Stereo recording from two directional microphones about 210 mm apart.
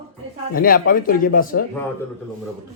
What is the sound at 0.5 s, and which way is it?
Speech, 45° left (ahead or behind).